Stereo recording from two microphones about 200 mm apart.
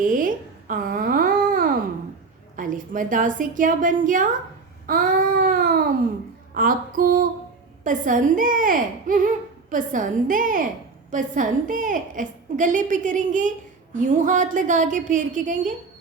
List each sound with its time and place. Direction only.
0.0 s babbling: 40° right (ahead or behind)
2.6 s speech: 40° right (ahead or behind)
4.9 s baby cry: 45° right (ahead or behind)
6.6 s a sound: 45° right (ahead or behind)
7.9 s speech: 40° right (ahead or behind)